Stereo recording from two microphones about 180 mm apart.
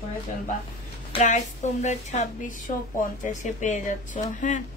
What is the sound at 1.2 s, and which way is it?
Speech, 40° left (ahead or behind).